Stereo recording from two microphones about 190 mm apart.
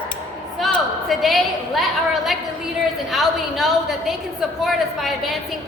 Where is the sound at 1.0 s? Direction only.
Centre (ahead or behind).